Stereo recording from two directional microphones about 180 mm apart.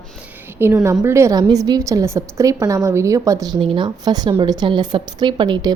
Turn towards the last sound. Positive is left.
turn(degrees=-25)  # may be behind; listen again after turning